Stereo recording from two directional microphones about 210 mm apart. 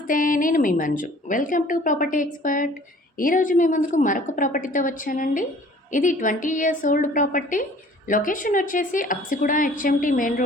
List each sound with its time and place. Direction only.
0.1 s a woman's voice: 40° left (ahead or behind)